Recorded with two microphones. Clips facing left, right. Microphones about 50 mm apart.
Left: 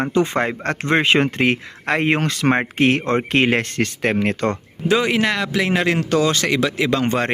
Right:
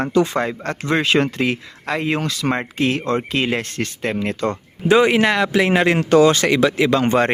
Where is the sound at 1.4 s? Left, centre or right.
Left.